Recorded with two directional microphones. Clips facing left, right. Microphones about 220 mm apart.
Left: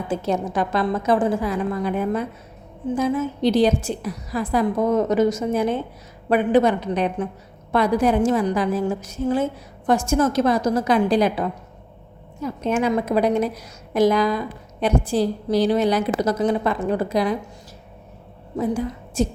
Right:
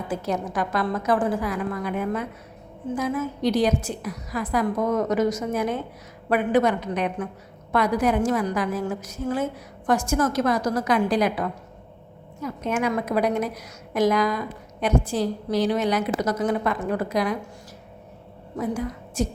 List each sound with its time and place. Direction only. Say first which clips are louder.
0.1 s a woman's voice: left 4 dB; 25° left (ahead or behind)
18.5 s a woman's voice: left 4 dB; 25° left (ahead or behind)